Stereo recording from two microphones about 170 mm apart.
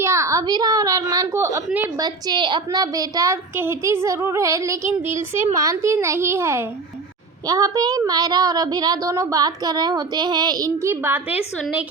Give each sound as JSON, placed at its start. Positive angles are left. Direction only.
{"t": 0.0, "sound": "a woman's voice", "side_deg": -15}
{"t": 5.1, "sound": "speech", "side_deg": -45}
{"t": 5.5, "sound": "a woman's voice", "side_deg": -20}